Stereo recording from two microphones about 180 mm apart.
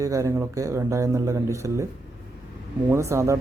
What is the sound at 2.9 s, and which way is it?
Speech, 15° right (ahead or behind).